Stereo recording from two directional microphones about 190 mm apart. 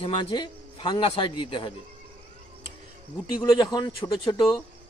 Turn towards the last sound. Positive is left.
turn(degrees=25)  # may be behind; listen again after turning